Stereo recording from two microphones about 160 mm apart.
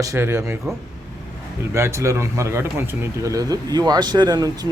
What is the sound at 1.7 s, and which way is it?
Speech, 20° right (ahead or behind).